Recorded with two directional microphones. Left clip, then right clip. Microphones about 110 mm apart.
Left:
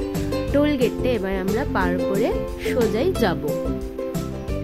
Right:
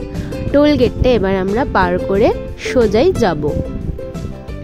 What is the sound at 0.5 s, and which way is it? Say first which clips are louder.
Speech: right 9 dB; 90° right.